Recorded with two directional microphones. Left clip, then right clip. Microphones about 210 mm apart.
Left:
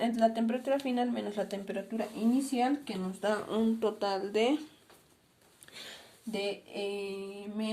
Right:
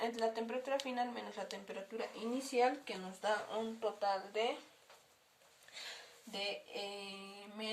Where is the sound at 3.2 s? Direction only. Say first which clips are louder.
Left 6 dB; 40° left (ahead or behind).